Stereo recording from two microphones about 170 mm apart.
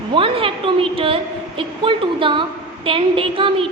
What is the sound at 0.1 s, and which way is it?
A woman's voice, 30° right (ahead or behind).